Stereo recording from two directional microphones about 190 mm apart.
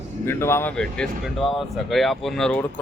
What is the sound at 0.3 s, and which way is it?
Speech, 15° left (ahead or behind).